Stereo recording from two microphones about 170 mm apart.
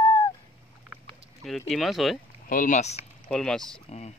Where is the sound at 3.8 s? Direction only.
40° left (ahead or behind).